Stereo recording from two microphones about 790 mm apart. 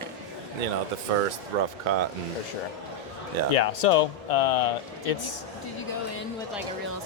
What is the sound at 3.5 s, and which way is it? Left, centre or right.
Speech, left.